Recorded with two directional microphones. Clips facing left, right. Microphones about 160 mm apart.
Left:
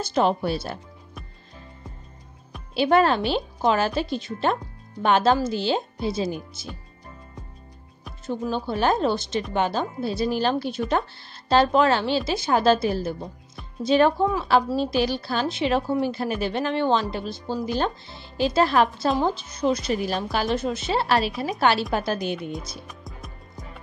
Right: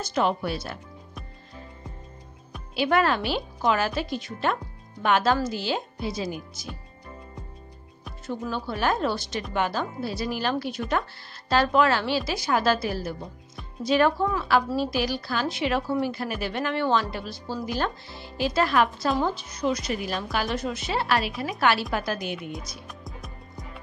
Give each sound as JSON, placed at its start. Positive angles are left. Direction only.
{"t": 0.0, "sound": "speech", "side_deg": 30}
{"t": 2.7, "sound": "speech", "side_deg": 30}
{"t": 8.3, "sound": "speech", "side_deg": 30}
{"t": 22.8, "sound": "music", "side_deg": 0}